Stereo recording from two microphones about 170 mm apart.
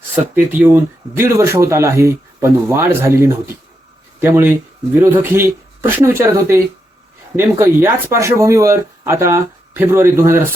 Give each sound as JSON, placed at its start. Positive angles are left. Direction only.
{"t": 0.2, "sound": "speech", "side_deg": -10}